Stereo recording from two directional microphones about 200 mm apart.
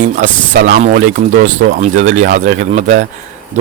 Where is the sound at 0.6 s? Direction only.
45° right (ahead or behind).